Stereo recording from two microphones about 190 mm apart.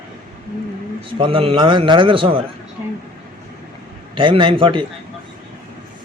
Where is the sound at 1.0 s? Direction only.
25° right (ahead or behind).